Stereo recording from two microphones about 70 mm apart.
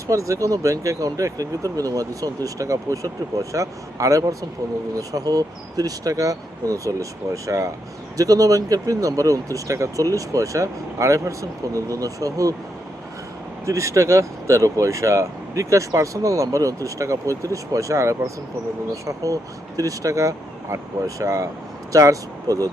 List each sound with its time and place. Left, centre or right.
0.1 s speech: right
13.7 s speech: right